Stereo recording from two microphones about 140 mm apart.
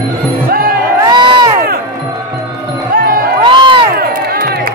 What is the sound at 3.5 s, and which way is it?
Music, 35° right (ahead or behind).